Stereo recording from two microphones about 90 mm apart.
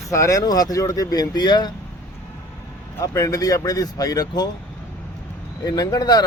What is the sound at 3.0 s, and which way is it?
Speech, 40° left (ahead or behind).